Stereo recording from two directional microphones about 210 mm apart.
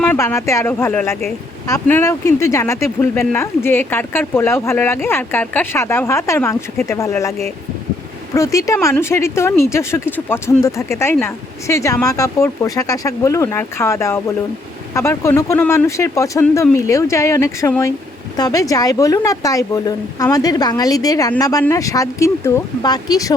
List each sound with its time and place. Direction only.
0.0 s speech: 5° left (ahead or behind)